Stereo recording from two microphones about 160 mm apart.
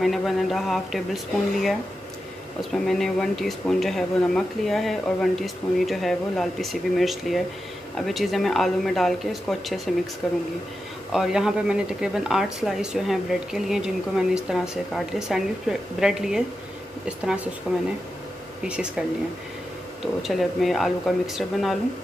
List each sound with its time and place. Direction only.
0.0 s speech: centre (ahead or behind)
17.7 s speech: centre (ahead or behind)
20.2 s speech: centre (ahead or behind)